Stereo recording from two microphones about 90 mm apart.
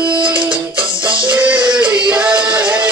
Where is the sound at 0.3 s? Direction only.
20° right (ahead or behind).